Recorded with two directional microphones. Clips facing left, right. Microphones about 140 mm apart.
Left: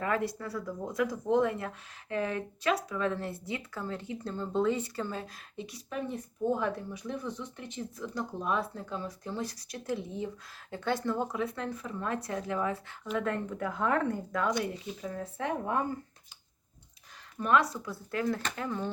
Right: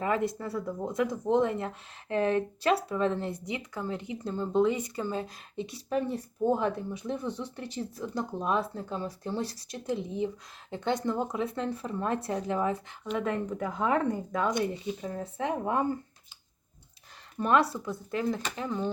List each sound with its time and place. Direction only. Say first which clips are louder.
0.0 s speech: right 2 dB; 20° right (ahead or behind)
13.1 s speech: right 2 dB; 15° right (ahead or behind)
17.4 s speech: right 2 dB; 30° right (ahead or behind)